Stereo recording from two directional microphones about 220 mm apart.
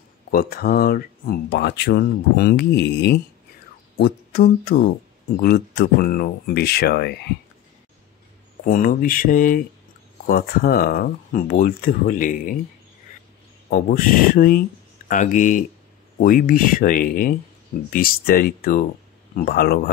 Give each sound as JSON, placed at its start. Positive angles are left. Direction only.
{"t": 0.3, "sound": "speech", "side_deg": 45}
{"t": 8.6, "sound": "speech", "side_deg": 40}
{"t": 13.7, "sound": "speech", "side_deg": 40}